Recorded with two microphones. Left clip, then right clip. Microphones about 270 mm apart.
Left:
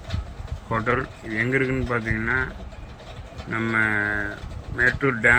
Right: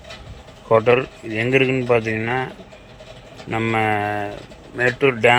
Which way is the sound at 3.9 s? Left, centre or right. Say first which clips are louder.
Right 3 dB; right.